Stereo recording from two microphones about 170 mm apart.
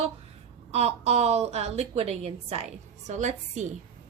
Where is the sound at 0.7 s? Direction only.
40° right (ahead or behind).